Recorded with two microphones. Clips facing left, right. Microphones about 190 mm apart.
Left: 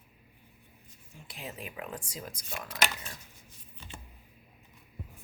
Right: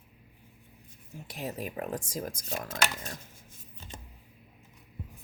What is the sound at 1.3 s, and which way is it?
Speech, 40° right (ahead or behind).